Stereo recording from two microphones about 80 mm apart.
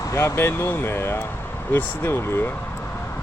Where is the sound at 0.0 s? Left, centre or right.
Left.